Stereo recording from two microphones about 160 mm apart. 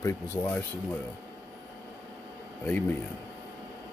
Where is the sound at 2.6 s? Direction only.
10° left (ahead or behind).